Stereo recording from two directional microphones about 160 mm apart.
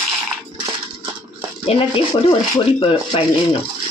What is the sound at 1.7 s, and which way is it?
Speech, 35° left (ahead or behind).